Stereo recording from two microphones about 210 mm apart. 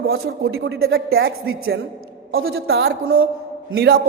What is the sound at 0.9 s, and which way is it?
A woman's voice, 50° right (ahead or behind).